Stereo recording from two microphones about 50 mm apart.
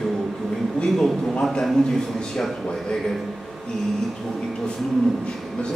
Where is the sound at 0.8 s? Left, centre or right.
Centre.